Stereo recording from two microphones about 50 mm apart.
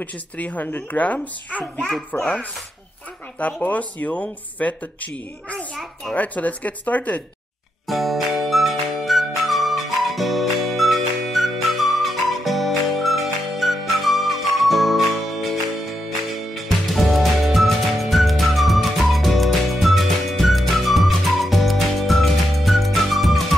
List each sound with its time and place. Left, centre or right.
0.0 s speech: left
2.1 s speech: left
3.3 s speech: left
7.8 s music: centre